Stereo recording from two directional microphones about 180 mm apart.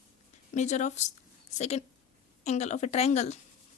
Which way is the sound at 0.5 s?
40° left (ahead or behind).